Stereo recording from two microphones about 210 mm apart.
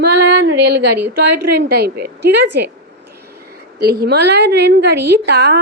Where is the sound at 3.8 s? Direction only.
50° right (ahead or behind).